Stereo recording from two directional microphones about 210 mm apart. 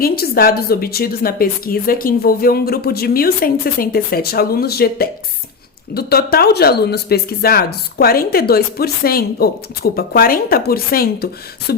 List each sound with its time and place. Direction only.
0.0 s speech: 45° left (ahead or behind)